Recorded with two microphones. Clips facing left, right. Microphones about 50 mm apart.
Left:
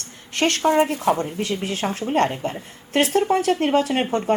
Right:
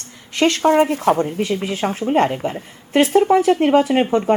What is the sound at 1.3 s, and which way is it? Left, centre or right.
Speech, right.